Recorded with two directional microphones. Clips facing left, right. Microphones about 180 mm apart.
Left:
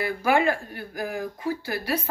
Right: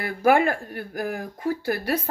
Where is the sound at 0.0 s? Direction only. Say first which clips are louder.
Right 2 dB; 50° right (ahead or behind).